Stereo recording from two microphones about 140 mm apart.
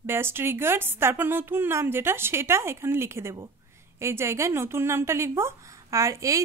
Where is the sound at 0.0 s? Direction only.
15° right (ahead or behind).